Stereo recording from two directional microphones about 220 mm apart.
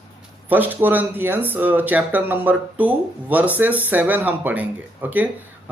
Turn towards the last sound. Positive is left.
turn(degrees=-5)  # may be behind; listen again after turning